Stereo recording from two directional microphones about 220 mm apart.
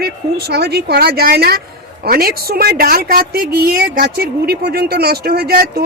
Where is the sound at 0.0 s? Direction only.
45° right (ahead or behind).